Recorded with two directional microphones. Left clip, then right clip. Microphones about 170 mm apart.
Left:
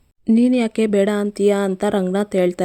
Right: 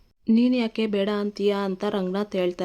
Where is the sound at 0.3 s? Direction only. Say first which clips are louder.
Left 5 dB; 25° left (ahead or behind).